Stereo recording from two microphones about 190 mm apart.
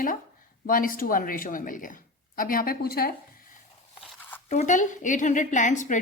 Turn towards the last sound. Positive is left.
turn(degrees=40)  # may be behind; listen again after turning